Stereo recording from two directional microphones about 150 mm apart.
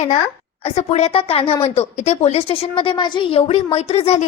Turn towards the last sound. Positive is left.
turn(degrees=45)  # may be behind; listen again after turning